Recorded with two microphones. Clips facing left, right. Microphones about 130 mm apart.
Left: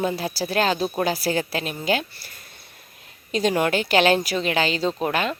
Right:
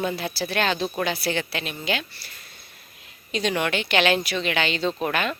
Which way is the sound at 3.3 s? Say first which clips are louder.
Left 4 dB; 40° left (ahead or behind).